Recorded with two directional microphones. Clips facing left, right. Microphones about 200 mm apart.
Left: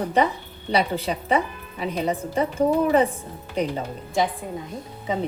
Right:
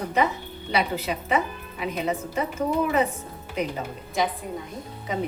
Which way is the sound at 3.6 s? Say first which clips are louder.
Left 3 dB; 35° left (ahead or behind).